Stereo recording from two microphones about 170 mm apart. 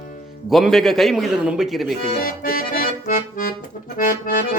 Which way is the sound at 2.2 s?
60° left (ahead or behind).